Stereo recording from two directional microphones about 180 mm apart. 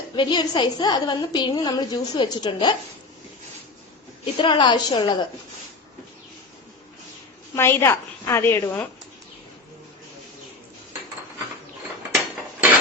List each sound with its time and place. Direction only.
0.2 s a woman's voice: 25° left (ahead or behind)
4.4 s a woman's voice: 25° left (ahead or behind)
7.5 s a woman's voice: 15° left (ahead or behind)